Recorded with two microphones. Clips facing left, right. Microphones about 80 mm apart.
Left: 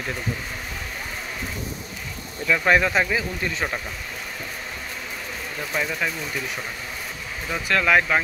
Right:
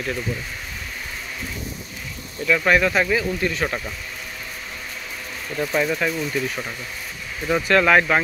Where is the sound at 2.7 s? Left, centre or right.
Centre.